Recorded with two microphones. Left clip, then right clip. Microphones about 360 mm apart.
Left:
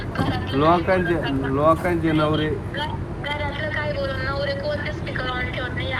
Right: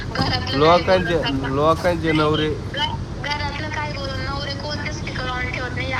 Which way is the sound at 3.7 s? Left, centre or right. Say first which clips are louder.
Left 2 dB; right.